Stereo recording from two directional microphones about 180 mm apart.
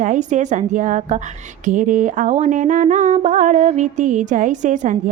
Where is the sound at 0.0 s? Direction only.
45° right (ahead or behind).